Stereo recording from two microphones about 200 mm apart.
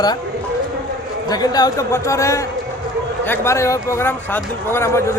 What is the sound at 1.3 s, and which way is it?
Speech, 20° left (ahead or behind).